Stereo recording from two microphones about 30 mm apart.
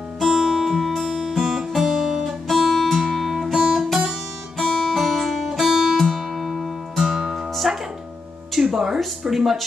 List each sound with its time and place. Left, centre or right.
0.3 s music: centre
0.7 s music: centre
3.5 s music: right
4.6 s guitar: centre
4.9 s music: centre
5.4 s music: centre
5.9 s music: centre
8.7 s speech: centre